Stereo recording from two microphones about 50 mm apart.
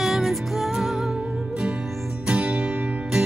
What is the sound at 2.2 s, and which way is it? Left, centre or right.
Music, right.